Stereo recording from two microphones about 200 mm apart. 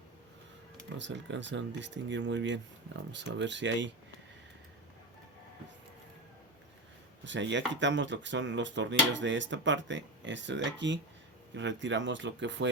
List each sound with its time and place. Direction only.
0.9 s speech: 65° right (ahead or behind)
7.3 s speech: 65° right (ahead or behind)